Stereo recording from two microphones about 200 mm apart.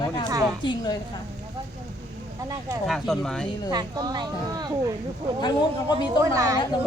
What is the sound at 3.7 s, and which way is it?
Speech, 20° right (ahead or behind).